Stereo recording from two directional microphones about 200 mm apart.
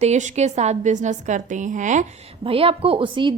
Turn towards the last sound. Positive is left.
turn(degrees=-25)  # may be behind; listen again after turning